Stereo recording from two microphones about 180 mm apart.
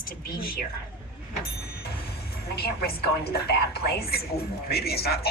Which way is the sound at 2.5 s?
60° left (ahead or behind).